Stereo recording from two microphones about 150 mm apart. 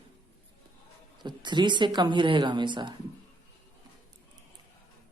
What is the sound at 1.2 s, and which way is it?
Speech, 30° right (ahead or behind).